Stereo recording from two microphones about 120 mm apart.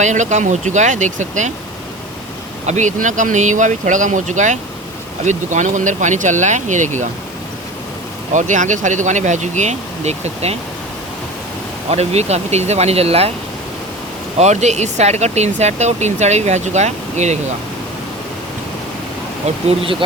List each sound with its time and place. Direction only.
0.0 s speech: 85° right
2.6 s speech: 90° right
8.3 s speech: 90° right; by 10.6 s 65° right (ahead or behind)
11.9 s speech: 65° right (ahead or behind)
14.3 s speech: 70° right (ahead or behind)
19.8 s speech: 50° right (ahead or behind)